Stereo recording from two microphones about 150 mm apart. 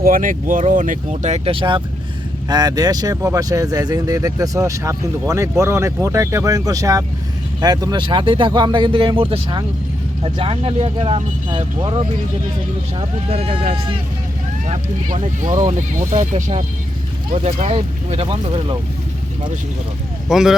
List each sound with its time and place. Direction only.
0.0 s speech: 65° right (ahead or behind); by 14.0 s 35° right (ahead or behind)
14.7 s speech: 50° right (ahead or behind); by 18.8 s 35° right (ahead or behind)
20.2 s speech: 5° right (ahead or behind)